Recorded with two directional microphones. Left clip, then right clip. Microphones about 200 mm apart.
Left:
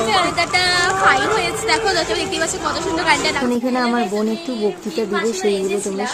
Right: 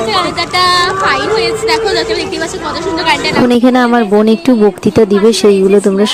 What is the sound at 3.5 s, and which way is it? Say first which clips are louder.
Speech: right 10 dB; 50° right (ahead or behind).